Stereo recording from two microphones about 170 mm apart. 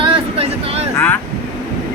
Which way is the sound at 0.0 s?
35° right (ahead or behind).